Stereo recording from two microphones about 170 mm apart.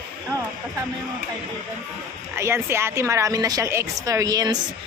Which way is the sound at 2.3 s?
15° right (ahead or behind).